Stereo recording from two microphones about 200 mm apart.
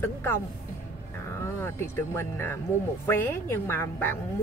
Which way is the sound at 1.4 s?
10° left (ahead or behind).